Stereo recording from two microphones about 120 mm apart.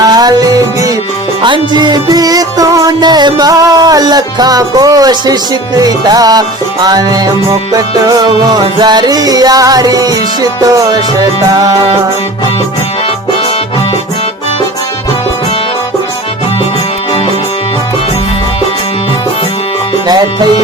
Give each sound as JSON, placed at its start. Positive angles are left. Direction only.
{"t": 0.0, "sound": "music", "side_deg": -35}
{"t": 1.4, "sound": "music", "side_deg": -45}
{"t": 20.1, "sound": "music", "side_deg": -35}